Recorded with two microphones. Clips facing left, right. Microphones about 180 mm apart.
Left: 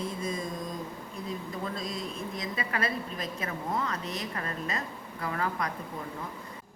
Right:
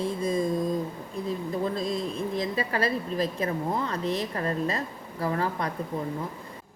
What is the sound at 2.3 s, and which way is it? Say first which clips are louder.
Speech: right 5 dB; 30° right (ahead or behind).